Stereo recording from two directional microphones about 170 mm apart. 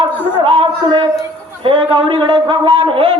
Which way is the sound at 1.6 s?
30° right (ahead or behind).